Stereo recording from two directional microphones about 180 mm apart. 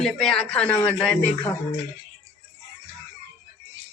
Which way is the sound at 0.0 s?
Centre (ahead or behind).